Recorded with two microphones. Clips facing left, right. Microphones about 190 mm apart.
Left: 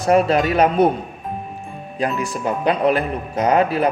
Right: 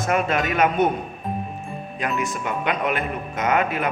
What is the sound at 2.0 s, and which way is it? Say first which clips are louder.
Speech: left 4 dB; 35° left (ahead or behind).